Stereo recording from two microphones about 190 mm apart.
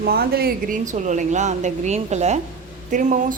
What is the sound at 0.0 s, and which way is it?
A woman's voice, 55° right (ahead or behind).